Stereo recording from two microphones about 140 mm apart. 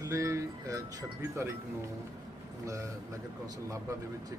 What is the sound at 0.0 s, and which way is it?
Speech, 25° right (ahead or behind).